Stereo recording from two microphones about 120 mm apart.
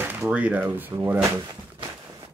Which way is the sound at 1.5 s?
35° right (ahead or behind).